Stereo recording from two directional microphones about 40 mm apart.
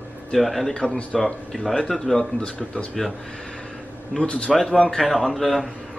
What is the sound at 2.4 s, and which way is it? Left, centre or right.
Speech, left.